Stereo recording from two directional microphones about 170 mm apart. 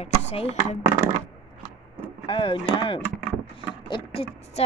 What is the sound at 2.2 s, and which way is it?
Chopping, 30° left (ahead or behind).